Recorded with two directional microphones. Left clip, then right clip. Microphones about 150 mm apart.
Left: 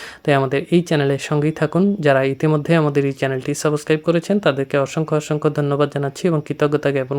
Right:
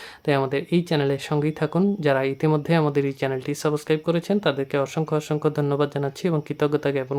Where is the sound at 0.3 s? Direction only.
30° left (ahead or behind).